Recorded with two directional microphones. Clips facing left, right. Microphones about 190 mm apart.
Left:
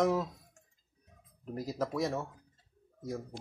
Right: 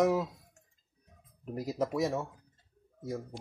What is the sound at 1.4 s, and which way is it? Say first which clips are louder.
A man's voice: right 2 dB; 15° right (ahead or behind).